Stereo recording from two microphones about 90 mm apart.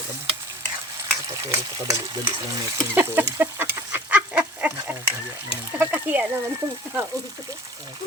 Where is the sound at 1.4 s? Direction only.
35° right (ahead or behind).